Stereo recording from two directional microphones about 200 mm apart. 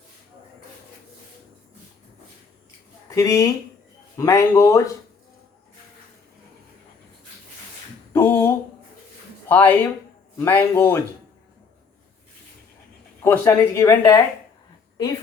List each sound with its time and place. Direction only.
3.1 s speech: 15° left (ahead or behind)
8.1 s a sound: 10° left (ahead or behind)
9.5 s speech: 10° left (ahead or behind)
13.2 s speech: 15° left (ahead or behind)